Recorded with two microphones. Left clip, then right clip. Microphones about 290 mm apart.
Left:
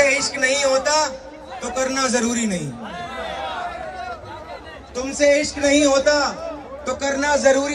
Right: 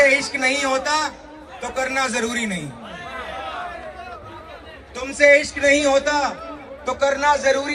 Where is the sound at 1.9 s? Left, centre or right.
Right.